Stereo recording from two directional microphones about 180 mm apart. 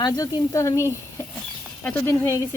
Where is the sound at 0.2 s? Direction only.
20° left (ahead or behind).